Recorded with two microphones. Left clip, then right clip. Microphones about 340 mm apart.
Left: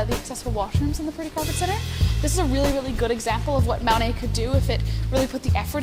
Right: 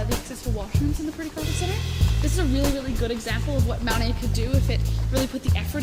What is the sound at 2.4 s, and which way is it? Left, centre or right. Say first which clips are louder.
Speech: left 3 dB; centre.